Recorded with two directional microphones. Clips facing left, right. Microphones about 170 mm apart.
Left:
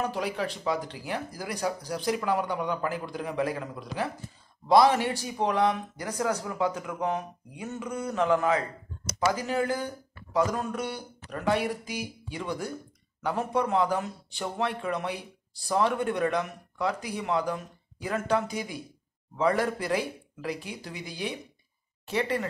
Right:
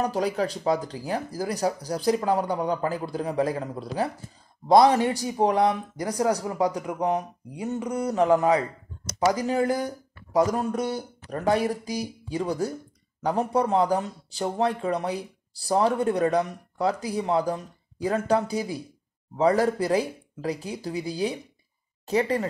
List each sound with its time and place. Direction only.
0.0 s speech: 35° right (ahead or behind)
5.2 s speech: 35° right (ahead or behind)
9.4 s speech: 35° right (ahead or behind)